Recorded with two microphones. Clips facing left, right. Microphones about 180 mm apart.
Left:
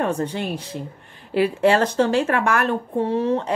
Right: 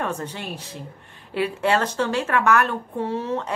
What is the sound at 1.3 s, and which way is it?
Speech, 35° left (ahead or behind).